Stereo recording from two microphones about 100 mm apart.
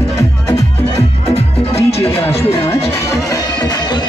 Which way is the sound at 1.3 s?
90° left.